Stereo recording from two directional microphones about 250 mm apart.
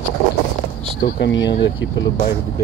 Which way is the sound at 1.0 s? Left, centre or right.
Left.